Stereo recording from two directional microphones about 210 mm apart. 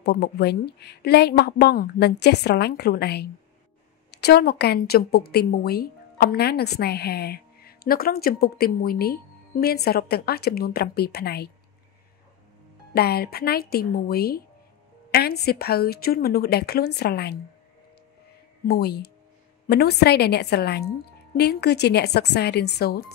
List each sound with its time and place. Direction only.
0.0 s speech: 50° left (ahead or behind)
12.9 s speech: 50° left (ahead or behind)
18.7 s speech: 50° left (ahead or behind)